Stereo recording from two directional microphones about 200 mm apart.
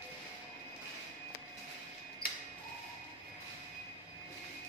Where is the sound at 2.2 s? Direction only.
45° left (ahead or behind).